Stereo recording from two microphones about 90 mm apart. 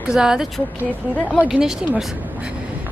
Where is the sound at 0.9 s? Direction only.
15° left (ahead or behind).